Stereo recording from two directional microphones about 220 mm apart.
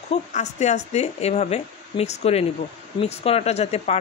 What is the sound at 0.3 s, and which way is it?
Speech, 30° left (ahead or behind).